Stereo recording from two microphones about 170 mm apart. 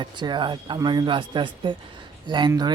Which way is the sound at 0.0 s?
25° right (ahead or behind).